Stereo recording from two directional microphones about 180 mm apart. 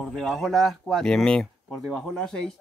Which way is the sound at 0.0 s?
Centre (ahead or behind).